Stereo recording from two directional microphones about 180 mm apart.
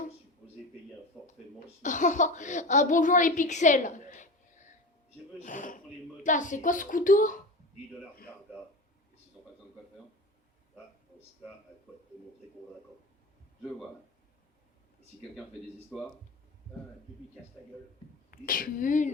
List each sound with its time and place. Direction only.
1.2 s a sound: 5° left (ahead or behind)
1.5 s a child's voice: 45° left (ahead or behind)
18.3 s a child's voice: 50° left (ahead or behind)